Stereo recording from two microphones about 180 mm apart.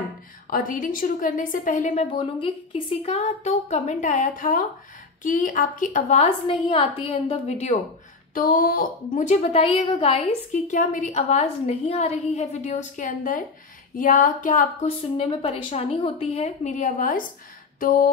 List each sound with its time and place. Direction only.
0.5 s a woman's voice: 50° left (ahead or behind)
2.1 s a woman's voice: 25° left (ahead or behind)
3.1 s a woman's voice: 40° left (ahead or behind)
8.4 s a woman's voice: 50° left (ahead or behind)
15.1 s a woman's voice: 30° left (ahead or behind); by 18.1 s 50° left (ahead or behind)